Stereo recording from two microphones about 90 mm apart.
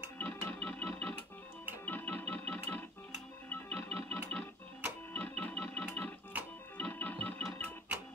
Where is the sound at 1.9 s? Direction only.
20° left (ahead or behind).